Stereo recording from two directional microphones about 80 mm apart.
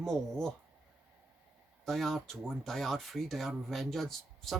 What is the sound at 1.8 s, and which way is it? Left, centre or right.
Speech, centre.